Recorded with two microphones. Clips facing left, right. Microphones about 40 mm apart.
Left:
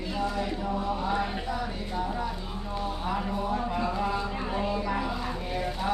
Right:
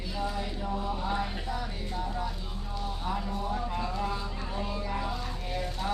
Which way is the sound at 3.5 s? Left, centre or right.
Centre.